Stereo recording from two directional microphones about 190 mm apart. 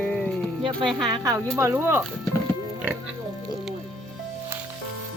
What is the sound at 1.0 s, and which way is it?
A woman's voice, 20° right (ahead or behind).